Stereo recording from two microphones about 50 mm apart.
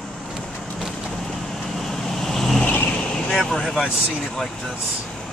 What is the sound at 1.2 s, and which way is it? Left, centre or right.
Vehicle, centre.